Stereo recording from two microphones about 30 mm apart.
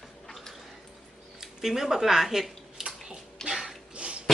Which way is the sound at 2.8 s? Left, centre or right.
Right.